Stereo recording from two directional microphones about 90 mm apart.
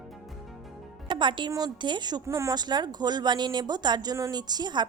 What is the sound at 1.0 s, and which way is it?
Music, 60° right (ahead or behind).